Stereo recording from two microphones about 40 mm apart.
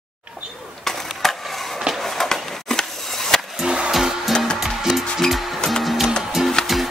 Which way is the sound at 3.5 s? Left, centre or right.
Centre.